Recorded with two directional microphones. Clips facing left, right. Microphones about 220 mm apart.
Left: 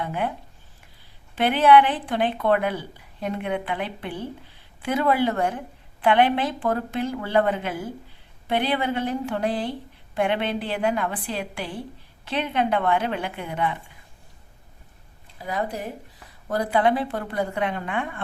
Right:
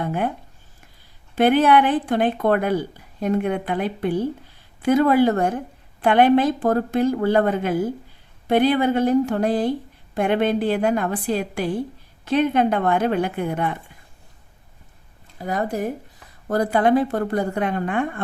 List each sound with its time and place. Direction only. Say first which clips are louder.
0.0 s speech: right 3 dB; 45° right (ahead or behind)
1.4 s a woman's voice: right 2 dB; 45° right (ahead or behind)
15.4 s a woman's voice: right 5 dB; 45° right (ahead or behind)